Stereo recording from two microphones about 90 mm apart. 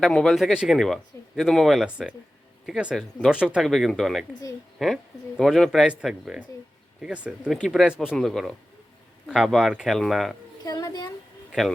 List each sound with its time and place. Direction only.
0.0 s speech: 5° left (ahead or behind)
5.8 s speech: 10° right (ahead or behind)
10.6 s a sound: 45° left (ahead or behind)